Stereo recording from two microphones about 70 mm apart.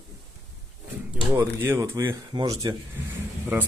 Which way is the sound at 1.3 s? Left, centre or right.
Right.